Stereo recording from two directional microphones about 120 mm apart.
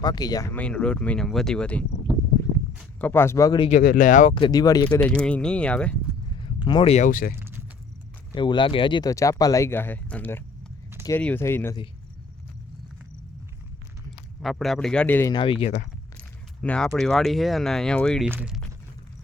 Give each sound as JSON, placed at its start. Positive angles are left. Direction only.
{"t": 0.0, "sound": "speech", "side_deg": 35}
{"t": 0.5, "sound": "speech", "side_deg": 10}
{"t": 3.0, "sound": "speech", "side_deg": 20}
{"t": 3.7, "sound": "speech", "side_deg": 90}
{"t": 4.4, "sound": "speech", "side_deg": 35}
{"t": 4.9, "sound": "speech", "side_deg": 5}
{"t": 6.7, "sound": "speech", "side_deg": 40}
{"t": 8.4, "sound": "speech", "side_deg": 40}
{"t": 9.0, "sound": "speech", "side_deg": 25}
{"t": 14.4, "sound": "a man's voice", "side_deg": 0}
{"t": 15.3, "sound": "speech", "side_deg": 45}
{"t": 16.1, "sound": "speech", "side_deg": 10}